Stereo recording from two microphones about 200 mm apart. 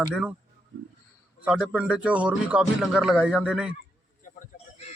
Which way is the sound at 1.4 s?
5° right (ahead or behind).